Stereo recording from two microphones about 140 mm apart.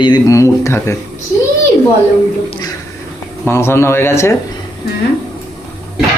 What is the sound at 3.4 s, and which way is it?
Speech, 15° left (ahead or behind).